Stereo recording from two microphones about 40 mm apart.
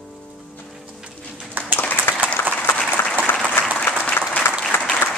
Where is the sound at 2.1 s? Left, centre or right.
Left.